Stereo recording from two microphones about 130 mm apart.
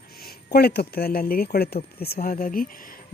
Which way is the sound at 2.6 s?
90° left.